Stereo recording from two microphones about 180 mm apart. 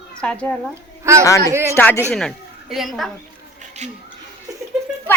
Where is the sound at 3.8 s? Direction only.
40° right (ahead or behind).